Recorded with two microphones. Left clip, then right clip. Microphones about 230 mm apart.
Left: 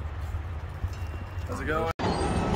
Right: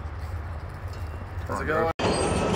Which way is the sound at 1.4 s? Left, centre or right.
Centre.